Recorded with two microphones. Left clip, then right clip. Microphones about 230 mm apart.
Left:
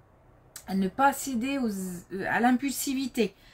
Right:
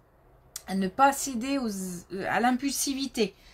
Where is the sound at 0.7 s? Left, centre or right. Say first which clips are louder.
Right 2 dB; right.